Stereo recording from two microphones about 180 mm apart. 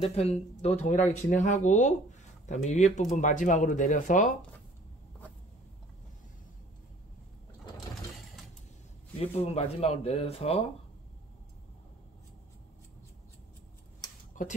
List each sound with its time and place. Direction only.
0.0 s speech: 35° left (ahead or behind)
9.2 s speech: 35° left (ahead or behind)